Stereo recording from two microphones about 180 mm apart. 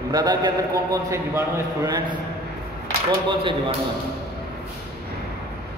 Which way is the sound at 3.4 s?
30° right (ahead or behind).